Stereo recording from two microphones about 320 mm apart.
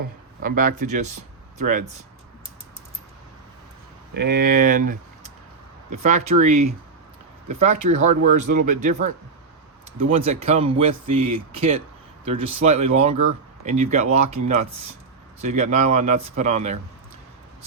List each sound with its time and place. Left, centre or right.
0.4 s speech: right
4.1 s speech: right